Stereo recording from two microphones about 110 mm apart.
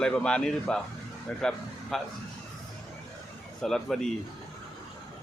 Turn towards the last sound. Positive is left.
turn(degrees=5)  # may be behind; listen again after turning